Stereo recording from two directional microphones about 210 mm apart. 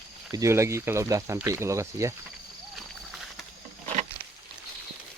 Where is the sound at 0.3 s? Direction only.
15° right (ahead or behind).